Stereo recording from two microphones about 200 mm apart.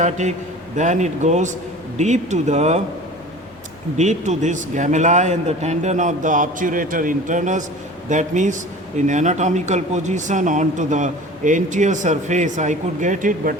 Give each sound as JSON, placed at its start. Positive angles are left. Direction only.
{"t": 0.0, "sound": "speech", "side_deg": -35}
{"t": 3.9, "sound": "speech", "side_deg": -35}